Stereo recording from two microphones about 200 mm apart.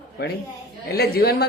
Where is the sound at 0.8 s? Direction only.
50° left (ahead or behind).